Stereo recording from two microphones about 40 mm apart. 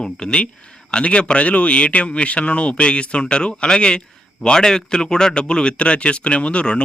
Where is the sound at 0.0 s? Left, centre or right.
Centre.